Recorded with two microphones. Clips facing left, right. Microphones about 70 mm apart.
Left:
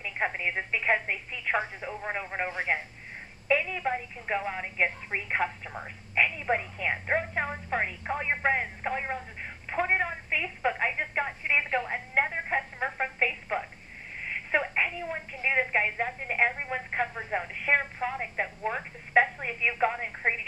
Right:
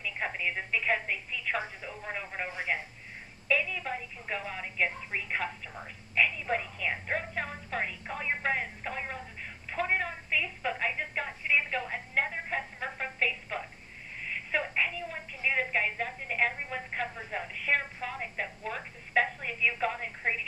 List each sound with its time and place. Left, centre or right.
0.0 s a woman's voice: left